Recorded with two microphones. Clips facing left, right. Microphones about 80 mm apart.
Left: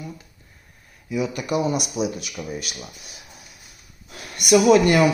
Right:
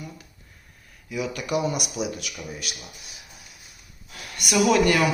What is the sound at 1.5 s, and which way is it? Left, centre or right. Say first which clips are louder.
Speech: left 3 dB; left.